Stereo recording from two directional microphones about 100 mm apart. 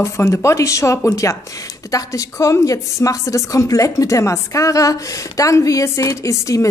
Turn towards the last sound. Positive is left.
turn(degrees=35)  # may be behind; listen again after turning